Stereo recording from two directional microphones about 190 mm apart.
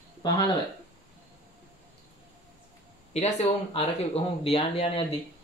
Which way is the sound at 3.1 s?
35° left (ahead or behind).